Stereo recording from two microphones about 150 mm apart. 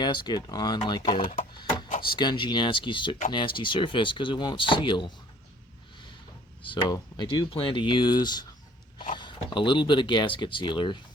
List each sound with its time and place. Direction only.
0.0 s speech: 30° left (ahead or behind)
6.6 s speech: 35° left (ahead or behind)